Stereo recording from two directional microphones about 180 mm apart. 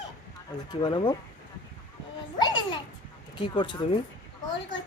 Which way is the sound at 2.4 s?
25° left (ahead or behind).